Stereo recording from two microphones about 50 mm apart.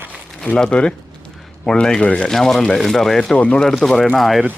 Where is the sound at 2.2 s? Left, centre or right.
Centre.